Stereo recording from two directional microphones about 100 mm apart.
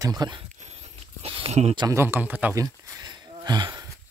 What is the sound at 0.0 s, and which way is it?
Speech, 40° right (ahead or behind).